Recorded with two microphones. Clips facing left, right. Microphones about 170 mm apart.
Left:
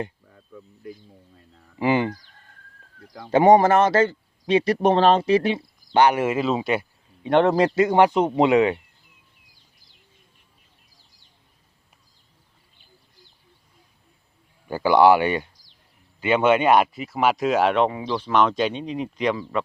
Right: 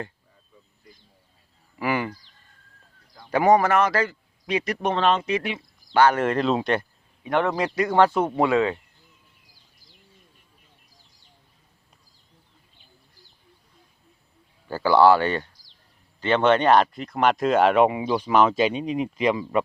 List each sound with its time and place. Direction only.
0.3 s insect: 60° left (ahead or behind)
1.8 s speech: 20° left (ahead or behind)
3.2 s speech: 25° left (ahead or behind)
6.0 s speech: 15° left (ahead or behind)
7.3 s speech: 30° left (ahead or behind)
7.9 s speech: 15° left (ahead or behind)
14.7 s speech: 15° left (ahead or behind); by 17.8 s centre (ahead or behind)
17.8 s speech: 10° right (ahead or behind)